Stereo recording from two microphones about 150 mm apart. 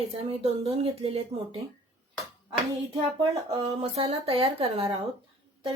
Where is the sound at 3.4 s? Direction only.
40° right (ahead or behind).